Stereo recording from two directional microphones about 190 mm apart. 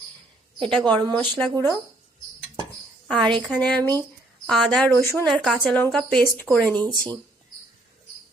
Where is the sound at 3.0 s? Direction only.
Centre (ahead or behind).